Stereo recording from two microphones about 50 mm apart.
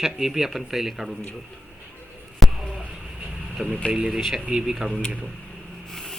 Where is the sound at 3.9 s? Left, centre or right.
Right.